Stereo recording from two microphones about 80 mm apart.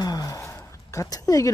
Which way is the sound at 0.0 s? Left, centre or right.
Left.